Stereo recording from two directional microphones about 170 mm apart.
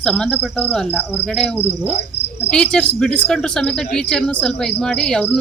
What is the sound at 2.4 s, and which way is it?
Speech, 5° left (ahead or behind).